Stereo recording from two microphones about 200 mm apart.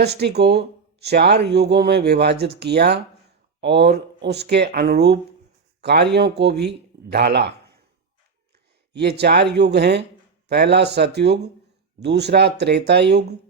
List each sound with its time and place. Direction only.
0.0 s speech: 55° right (ahead or behind)
8.9 s speech: 55° right (ahead or behind)